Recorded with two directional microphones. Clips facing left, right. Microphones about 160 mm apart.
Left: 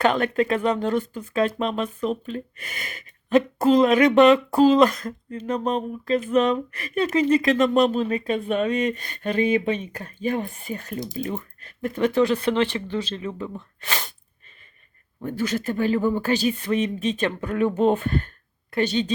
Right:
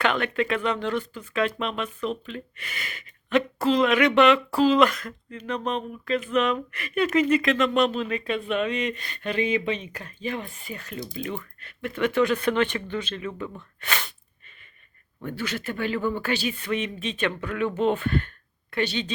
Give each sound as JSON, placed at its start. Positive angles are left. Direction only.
{"t": 0.0, "sound": "speech", "side_deg": 40}
{"t": 13.6, "sound": "sneeze", "side_deg": 30}
{"t": 15.2, "sound": "speech", "side_deg": 40}